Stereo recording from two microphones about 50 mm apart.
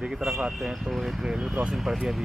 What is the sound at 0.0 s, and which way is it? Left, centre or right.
Speech, centre.